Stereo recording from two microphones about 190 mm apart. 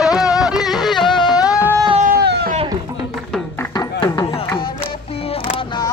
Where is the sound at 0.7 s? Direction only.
Centre (ahead or behind).